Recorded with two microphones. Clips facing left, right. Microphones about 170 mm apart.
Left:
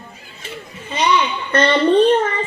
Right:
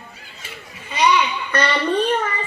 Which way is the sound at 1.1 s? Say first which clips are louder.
Left 3 dB; 25° left (ahead or behind).